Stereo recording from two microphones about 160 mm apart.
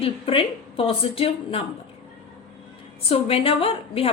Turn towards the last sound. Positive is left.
turn(degrees=35)  # may be behind; listen again after turning